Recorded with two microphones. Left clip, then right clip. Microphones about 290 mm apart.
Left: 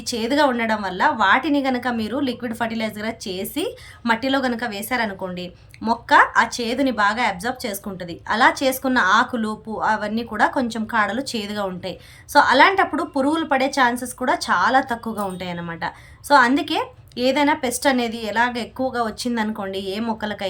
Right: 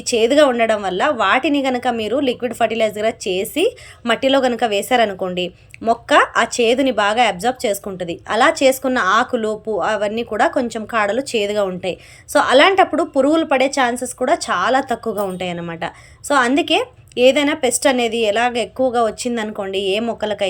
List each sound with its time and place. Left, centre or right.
0.0 s a woman's voice: centre